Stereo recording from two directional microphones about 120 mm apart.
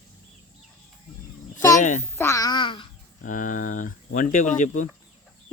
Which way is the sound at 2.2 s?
25° left (ahead or behind).